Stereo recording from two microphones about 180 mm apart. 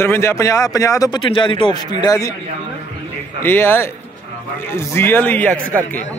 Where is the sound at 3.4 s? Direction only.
10° left (ahead or behind).